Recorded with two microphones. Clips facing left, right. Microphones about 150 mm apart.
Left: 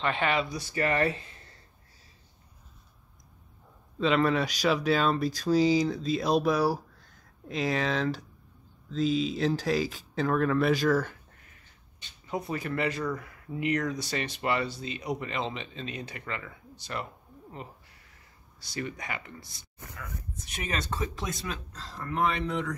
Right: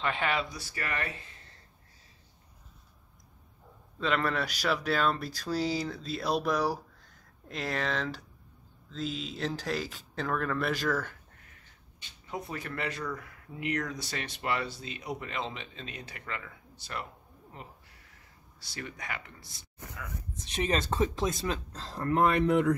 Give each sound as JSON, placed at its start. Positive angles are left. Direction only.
{"t": 0.0, "sound": "speech", "side_deg": -5}
{"t": 0.5, "sound": "speech", "side_deg": 20}
{"t": 4.0, "sound": "speech", "side_deg": 15}
{"t": 9.3, "sound": "speech", "side_deg": 10}
{"t": 12.3, "sound": "speech", "side_deg": 0}
{"t": 18.6, "sound": "speech", "side_deg": 0}
{"t": 20.3, "sound": "speech", "side_deg": -25}
{"t": 22.0, "sound": "speech", "side_deg": -55}